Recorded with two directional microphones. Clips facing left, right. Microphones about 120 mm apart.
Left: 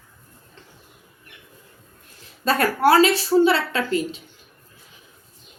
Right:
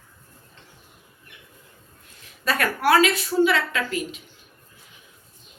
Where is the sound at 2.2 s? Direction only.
30° left (ahead or behind).